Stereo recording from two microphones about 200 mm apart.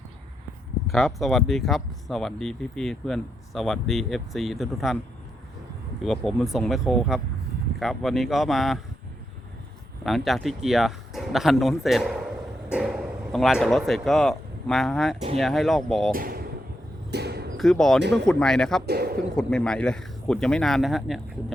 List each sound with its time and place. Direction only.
0.9 s speech: centre (ahead or behind)
6.0 s speech: centre (ahead or behind)
10.0 s speech: centre (ahead or behind)
16.1 s a sound: 50° right (ahead or behind)
17.6 s speech: centre (ahead or behind)
18.9 s bird: 50° right (ahead or behind)
19.4 s speech: 5° left (ahead or behind)